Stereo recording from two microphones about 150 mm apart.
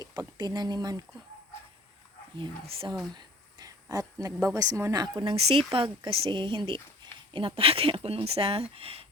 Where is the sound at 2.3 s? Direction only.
30° right (ahead or behind).